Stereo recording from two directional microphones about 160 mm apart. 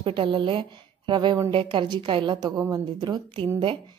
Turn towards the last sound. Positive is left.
turn(degrees=-35)  # may be behind; listen again after turning